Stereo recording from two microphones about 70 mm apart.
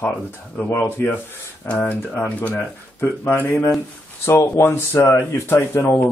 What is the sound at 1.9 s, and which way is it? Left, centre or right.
Speech, left.